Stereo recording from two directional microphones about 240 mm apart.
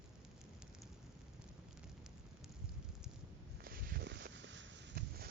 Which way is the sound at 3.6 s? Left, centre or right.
Right.